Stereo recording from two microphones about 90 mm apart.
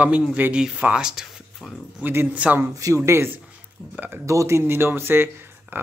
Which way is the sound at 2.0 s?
25° right (ahead or behind).